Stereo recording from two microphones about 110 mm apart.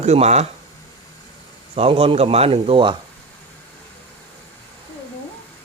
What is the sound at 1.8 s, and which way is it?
Speech, 60° right (ahead or behind).